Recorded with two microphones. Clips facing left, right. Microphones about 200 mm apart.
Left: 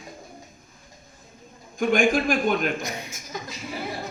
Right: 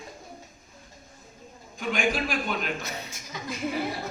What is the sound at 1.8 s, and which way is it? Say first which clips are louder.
Speech: left 7 dB; 50° left (ahead or behind).